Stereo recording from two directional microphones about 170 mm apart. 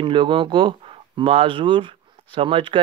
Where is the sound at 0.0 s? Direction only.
30° right (ahead or behind).